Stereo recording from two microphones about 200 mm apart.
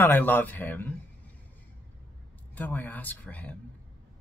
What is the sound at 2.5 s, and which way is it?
Speech, 10° left (ahead or behind).